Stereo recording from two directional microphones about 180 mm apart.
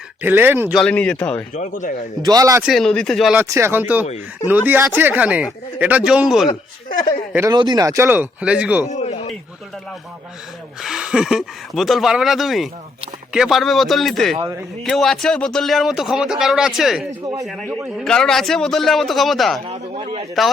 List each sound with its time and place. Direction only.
0.2 s speech: 10° right (ahead or behind)
0.8 s speech: 5° left (ahead or behind)
1.5 s speech: 45° left (ahead or behind)
2.2 s speech: 20° right (ahead or behind)
2.6 s speech: centre (ahead or behind)
3.5 s speech: 15° right (ahead or behind)
7.3 s speech: 20° right (ahead or behind)
8.9 s a sound: 40° left (ahead or behind)
10.8 s speech: 5° right (ahead or behind)
19.6 s speech: 30° right (ahead or behind)